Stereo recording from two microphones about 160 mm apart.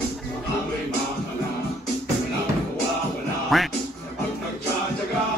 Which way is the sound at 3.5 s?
Centre (ahead or behind).